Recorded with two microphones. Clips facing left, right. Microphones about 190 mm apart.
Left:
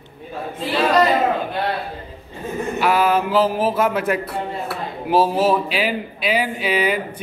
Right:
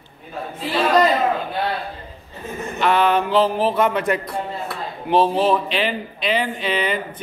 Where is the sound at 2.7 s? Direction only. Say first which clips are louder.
Even; 5° left (ahead or behind).